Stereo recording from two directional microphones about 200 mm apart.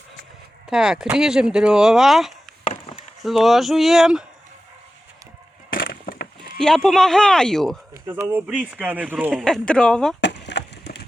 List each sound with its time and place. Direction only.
0.7 s speech: 5° right (ahead or behind)
2.6 s chop: 30° left (ahead or behind)
3.2 s speech: centre (ahead or behind)
5.7 s a sound: 45° left (ahead or behind)
6.6 s speech: 5° left (ahead or behind)
8.0 s speech: 10° right (ahead or behind)
9.4 s speech: 5° left (ahead or behind)
10.2 s splinter: 60° left (ahead or behind)